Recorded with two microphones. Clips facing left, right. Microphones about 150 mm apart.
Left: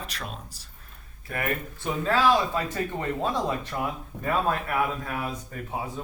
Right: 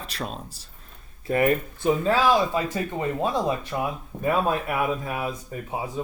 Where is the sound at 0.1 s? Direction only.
30° right (ahead or behind).